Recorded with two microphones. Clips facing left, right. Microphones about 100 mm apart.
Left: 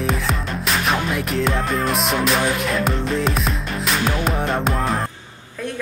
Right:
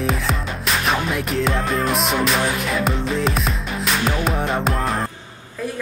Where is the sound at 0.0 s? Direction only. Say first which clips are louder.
Even; centre (ahead or behind).